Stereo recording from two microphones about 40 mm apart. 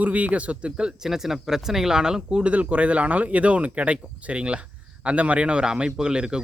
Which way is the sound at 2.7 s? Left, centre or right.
Right.